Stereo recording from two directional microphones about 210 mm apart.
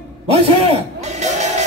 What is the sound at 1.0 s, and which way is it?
Music, 35° right (ahead or behind).